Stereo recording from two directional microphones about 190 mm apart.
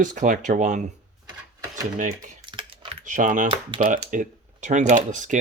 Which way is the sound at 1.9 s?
40° right (ahead or behind).